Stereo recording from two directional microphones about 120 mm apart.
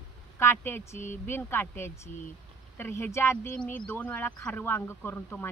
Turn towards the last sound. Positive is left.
turn(degrees=15)  # may be behind; listen again after turning